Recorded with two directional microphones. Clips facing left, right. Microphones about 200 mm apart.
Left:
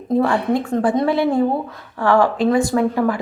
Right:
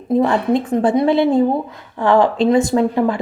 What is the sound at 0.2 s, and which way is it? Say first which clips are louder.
Speech: right 2 dB; 20° right (ahead or behind).